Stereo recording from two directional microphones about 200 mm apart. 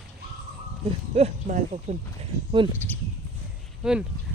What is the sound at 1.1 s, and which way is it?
Speech, 35° right (ahead or behind).